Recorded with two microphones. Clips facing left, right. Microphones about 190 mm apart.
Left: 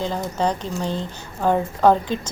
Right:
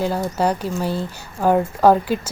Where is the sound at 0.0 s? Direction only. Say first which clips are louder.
Right 3 dB; 10° right (ahead or behind).